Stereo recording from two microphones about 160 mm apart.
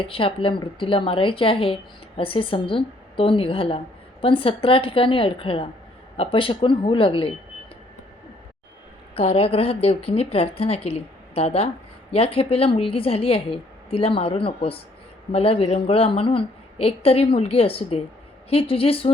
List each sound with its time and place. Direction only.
0.0 s a woman's voice: 35° left (ahead or behind)
9.1 s a woman's voice: 40° left (ahead or behind)